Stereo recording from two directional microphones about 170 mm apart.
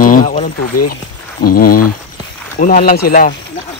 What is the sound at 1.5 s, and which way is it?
Speech, 60° left (ahead or behind).